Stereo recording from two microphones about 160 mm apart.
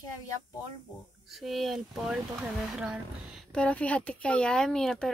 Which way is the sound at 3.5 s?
5° left (ahead or behind).